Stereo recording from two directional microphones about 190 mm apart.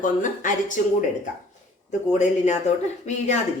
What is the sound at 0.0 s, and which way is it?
Speech, 45° left (ahead or behind).